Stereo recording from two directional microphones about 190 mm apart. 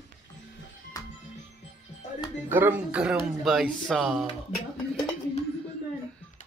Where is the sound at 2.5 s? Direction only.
10° right (ahead or behind).